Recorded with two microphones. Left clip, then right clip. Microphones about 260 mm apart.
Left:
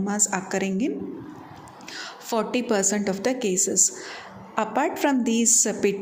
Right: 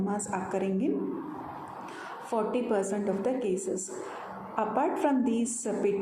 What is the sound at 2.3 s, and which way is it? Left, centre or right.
A woman's voice, left.